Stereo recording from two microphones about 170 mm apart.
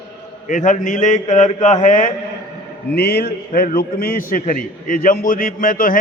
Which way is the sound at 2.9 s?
70° left (ahead or behind).